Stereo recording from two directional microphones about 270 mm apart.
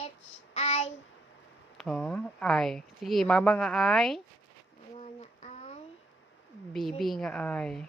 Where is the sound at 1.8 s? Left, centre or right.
Centre.